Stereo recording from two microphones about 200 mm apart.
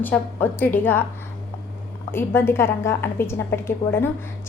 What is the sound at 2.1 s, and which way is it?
A woman's voice, 10° left (ahead or behind).